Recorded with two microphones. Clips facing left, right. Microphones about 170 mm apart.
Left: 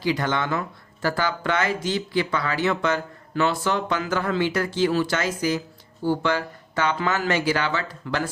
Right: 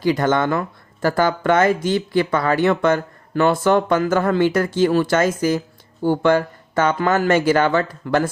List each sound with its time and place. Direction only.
0.0 s speech: 50° right (ahead or behind)